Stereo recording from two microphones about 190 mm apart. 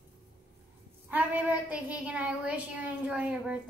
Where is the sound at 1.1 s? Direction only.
10° right (ahead or behind).